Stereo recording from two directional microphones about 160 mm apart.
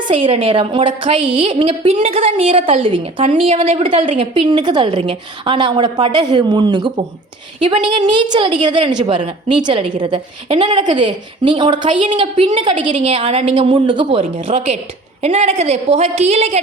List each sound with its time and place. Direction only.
0.1 s a woman's voice: 35° right (ahead or behind)